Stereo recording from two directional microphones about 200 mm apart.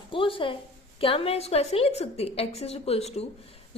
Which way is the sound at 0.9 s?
30° left (ahead or behind).